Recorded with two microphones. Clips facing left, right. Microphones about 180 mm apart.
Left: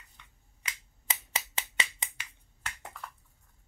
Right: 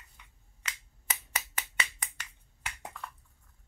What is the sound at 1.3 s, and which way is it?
Finger snapping, 25° left (ahead or behind).